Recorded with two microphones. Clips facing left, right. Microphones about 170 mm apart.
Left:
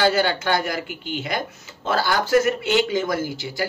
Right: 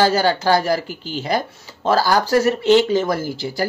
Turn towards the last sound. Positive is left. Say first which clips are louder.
# right 3 dB
turn(degrees=-40)  # may be behind; listen again after turning